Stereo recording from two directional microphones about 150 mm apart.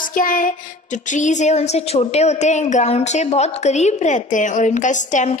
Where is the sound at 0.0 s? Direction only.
65° left (ahead or behind).